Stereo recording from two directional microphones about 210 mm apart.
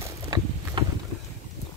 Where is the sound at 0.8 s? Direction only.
20° right (ahead or behind).